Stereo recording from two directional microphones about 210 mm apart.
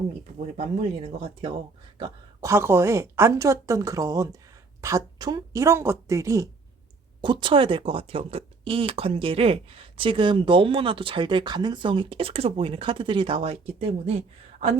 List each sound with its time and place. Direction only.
0.3 s a woman's voice: 35° right (ahead or behind)